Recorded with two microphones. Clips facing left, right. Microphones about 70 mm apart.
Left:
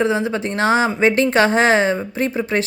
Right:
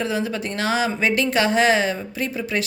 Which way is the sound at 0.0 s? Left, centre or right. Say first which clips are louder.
Left 5 dB; left.